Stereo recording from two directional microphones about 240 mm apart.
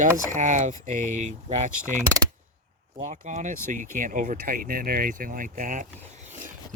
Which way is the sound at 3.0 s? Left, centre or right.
Right.